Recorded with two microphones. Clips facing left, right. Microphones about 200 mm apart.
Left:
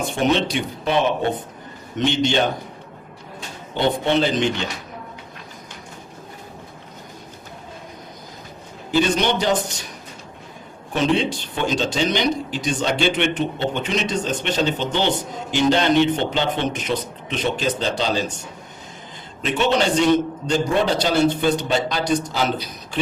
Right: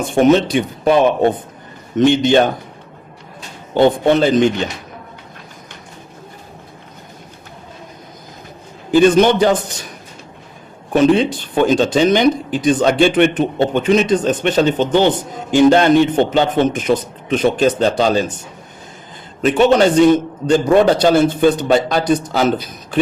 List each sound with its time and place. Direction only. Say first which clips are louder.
0.0 s speech: right 8 dB; 50° right (ahead or behind)
2.0 s speech: right 8 dB; 50° right (ahead or behind)
4.0 s speech: right 7 dB; 50° right (ahead or behind)
8.9 s speech: right 9 dB; 50° right (ahead or behind)
10.9 s speech: right 8 dB; 50° right (ahead or behind)
19.5 s speech: right 8 dB; 50° right (ahead or behind)